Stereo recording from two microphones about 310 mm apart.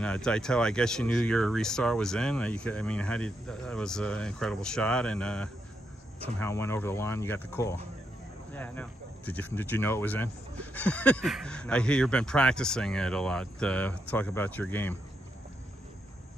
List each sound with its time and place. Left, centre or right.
0.0 s speech: centre